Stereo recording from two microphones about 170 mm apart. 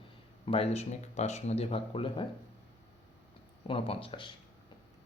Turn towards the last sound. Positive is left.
turn(degrees=30)  # may be behind; listen again after turning